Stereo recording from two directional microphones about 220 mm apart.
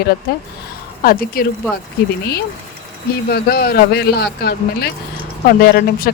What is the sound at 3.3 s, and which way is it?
Speech, 45° left (ahead or behind).